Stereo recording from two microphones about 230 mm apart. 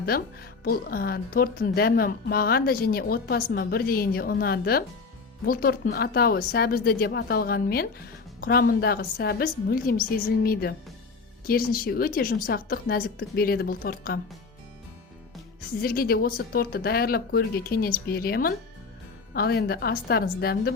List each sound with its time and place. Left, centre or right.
0.1 s speech: left
15.8 s a woman's voice: left